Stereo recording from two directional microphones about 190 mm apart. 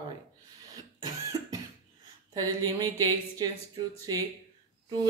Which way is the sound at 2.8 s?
20° right (ahead or behind).